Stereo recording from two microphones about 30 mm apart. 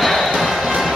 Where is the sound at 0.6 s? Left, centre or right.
Centre.